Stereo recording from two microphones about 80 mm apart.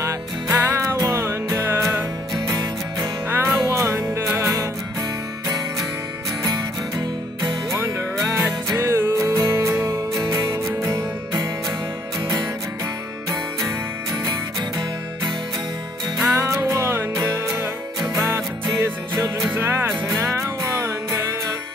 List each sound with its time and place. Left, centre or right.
0.0 s music: right
2.4 s music: right
3.3 s music: right
6.4 s music: right
8.3 s music: right
8.7 s music: right
9.4 s music: right
16.3 s music: right
17.1 s music: right
18.1 s music: right
19.4 s music: right
20.1 s music: right